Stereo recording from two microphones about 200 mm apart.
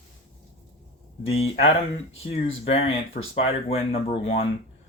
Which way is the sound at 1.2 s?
30° left (ahead or behind).